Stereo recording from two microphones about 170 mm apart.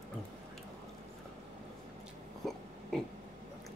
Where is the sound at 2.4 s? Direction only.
Centre (ahead or behind).